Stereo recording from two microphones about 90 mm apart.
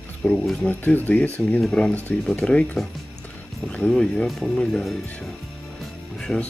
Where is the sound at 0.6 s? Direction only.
20° left (ahead or behind).